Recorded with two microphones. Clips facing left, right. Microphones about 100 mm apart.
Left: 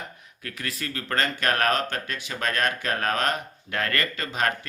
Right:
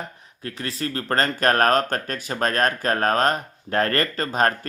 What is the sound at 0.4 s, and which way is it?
Speech, 30° right (ahead or behind).